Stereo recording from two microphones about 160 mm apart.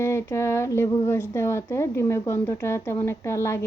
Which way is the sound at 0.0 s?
15° left (ahead or behind).